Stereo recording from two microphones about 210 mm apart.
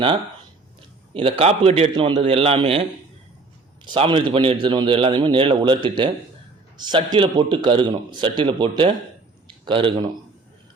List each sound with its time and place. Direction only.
1.1 s a man's voice: 25° right (ahead or behind)
3.8 s a man's voice: 25° right (ahead or behind)